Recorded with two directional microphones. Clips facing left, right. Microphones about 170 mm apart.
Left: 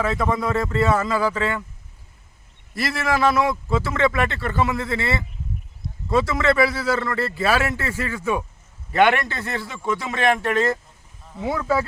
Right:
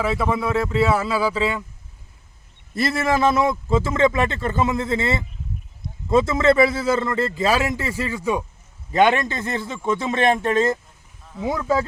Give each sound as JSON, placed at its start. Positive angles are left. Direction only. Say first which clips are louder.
{"t": 0.0, "sound": "speech", "louder": "even", "side_deg": -5}
{"t": 2.7, "sound": "speech", "louder": "right 3 dB", "side_deg": -25}